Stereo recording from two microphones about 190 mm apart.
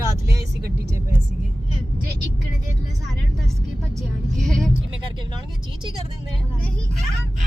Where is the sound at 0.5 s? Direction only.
60° right (ahead or behind).